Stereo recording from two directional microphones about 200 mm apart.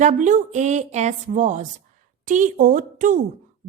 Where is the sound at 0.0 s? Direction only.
40° right (ahead or behind).